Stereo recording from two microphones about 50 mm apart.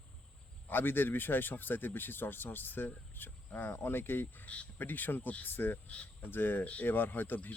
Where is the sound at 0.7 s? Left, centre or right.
Left.